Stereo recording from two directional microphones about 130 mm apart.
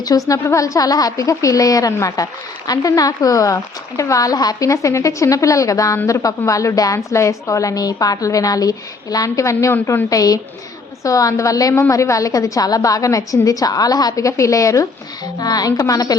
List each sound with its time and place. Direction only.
0.3 s a woman's voice: 25° left (ahead or behind)